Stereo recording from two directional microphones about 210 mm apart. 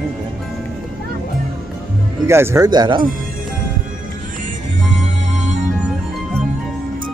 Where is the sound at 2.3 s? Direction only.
10° right (ahead or behind).